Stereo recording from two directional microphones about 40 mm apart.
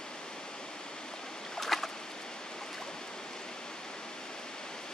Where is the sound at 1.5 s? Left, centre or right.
Centre.